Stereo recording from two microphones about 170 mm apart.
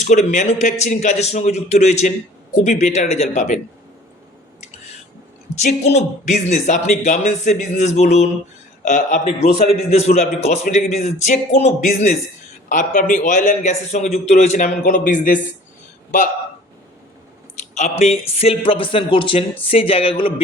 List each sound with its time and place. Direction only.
0.0 s a man's voice: 45° left (ahead or behind)
5.6 s a man's voice: 40° left (ahead or behind)
8.8 s a man's voice: 50° left (ahead or behind)
9.7 s a man's voice: 40° left (ahead or behind)
17.7 s speech: 40° left (ahead or behind)